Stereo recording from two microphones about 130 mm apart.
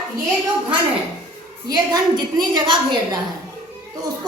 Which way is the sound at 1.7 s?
30° right (ahead or behind).